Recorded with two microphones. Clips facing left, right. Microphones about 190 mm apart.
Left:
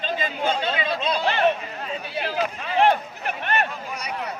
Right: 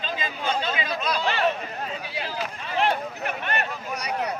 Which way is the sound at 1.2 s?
50° left (ahead or behind).